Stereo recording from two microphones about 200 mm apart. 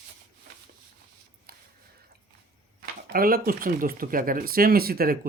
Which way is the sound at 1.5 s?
50° right (ahead or behind).